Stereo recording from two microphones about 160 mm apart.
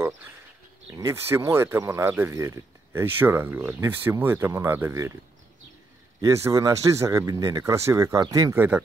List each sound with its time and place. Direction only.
0.9 s speech: 20° right (ahead or behind)
6.2 s speech: 20° right (ahead or behind)